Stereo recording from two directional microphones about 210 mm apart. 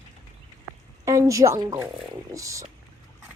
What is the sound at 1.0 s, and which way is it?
A woman's voice, 15° right (ahead or behind).